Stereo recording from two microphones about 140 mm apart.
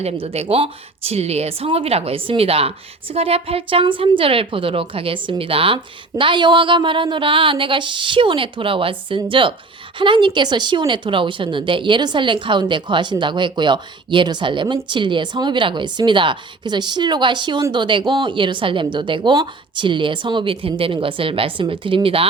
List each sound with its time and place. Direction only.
0.0 s a woman's voice: 45° right (ahead or behind)